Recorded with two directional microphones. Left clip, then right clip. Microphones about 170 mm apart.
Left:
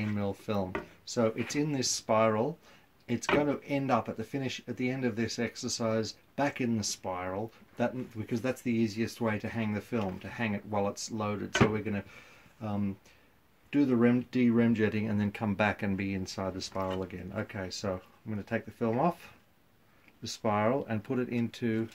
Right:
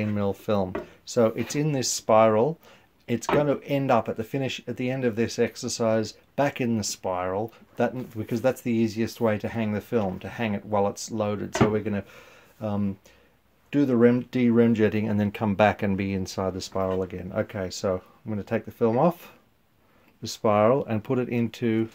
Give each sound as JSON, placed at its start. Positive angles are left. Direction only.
{"t": 0.0, "sound": "speech", "side_deg": -40}